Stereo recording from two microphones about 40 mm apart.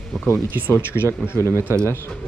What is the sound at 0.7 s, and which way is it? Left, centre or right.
Speech, left.